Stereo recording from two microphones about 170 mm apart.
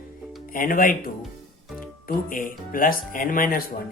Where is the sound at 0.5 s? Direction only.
55° left (ahead or behind).